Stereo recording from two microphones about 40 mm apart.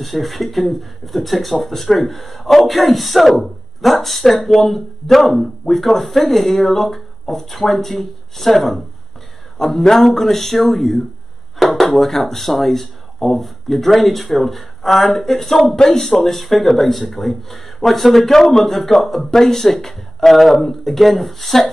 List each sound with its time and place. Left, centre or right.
0.0 s a man's voice: centre